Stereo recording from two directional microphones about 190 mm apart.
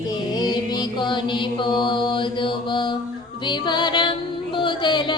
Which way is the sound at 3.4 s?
25° left (ahead or behind).